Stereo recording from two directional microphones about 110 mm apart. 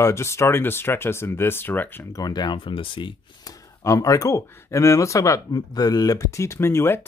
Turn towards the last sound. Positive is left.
turn(degrees=20)  # may be behind; listen again after turning